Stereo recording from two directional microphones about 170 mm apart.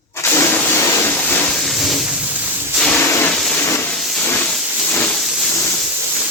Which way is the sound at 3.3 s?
5° left (ahead or behind).